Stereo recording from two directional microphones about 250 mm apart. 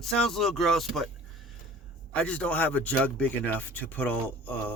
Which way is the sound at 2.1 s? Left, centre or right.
Centre.